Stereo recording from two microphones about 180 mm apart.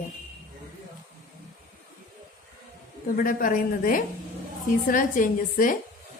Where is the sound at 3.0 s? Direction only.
50° left (ahead or behind).